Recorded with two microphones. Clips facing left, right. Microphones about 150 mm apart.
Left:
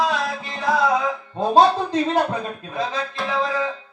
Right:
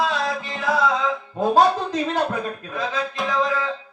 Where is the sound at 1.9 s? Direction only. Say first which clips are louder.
Left 3 dB; 20° left (ahead or behind).